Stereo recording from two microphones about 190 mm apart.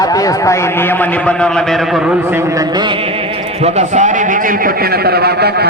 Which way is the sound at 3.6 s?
35° right (ahead or behind).